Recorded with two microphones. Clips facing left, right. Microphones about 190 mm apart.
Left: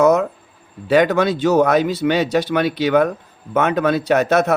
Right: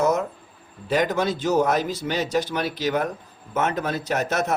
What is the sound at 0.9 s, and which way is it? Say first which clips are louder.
Speech: left 7 dB; 70° left (ahead or behind).